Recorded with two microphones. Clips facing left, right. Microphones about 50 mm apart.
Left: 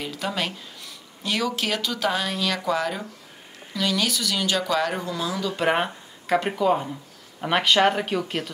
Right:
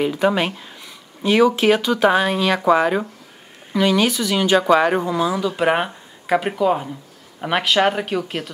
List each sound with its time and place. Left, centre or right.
0.0 s speech: right
5.5 s speech: centre